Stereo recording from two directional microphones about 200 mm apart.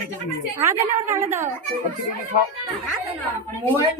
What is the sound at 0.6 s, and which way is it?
Speech, 15° right (ahead or behind).